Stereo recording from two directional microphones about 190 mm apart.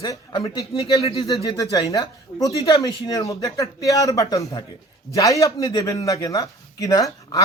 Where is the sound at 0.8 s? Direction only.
30° left (ahead or behind).